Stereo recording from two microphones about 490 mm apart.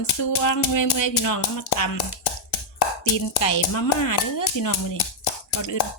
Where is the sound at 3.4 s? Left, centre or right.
Left.